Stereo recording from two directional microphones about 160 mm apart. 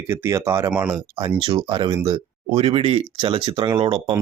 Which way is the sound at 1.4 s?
35° right (ahead or behind).